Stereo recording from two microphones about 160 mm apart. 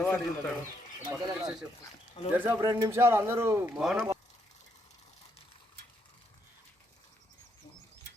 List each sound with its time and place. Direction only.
0.0 s speech: 15° left (ahead or behind)
1.2 s speech: 25° right (ahead or behind)
2.3 s speech: 10° right (ahead or behind)
3.8 s speech: 5° right (ahead or behind)